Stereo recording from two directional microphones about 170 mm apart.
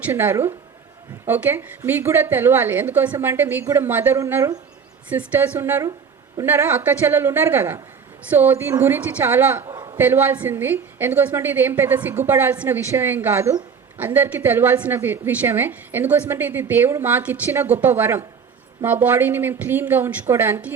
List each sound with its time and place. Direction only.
0.0 s a woman's voice: 15° right (ahead or behind)
9.7 s a sound: 25° right (ahead or behind)
10.0 s a woman's voice: 15° right (ahead or behind)